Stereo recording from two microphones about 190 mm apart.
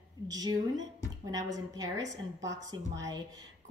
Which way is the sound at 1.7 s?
20° right (ahead or behind).